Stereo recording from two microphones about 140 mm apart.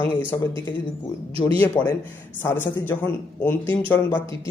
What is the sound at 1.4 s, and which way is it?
Speech, 10° left (ahead or behind).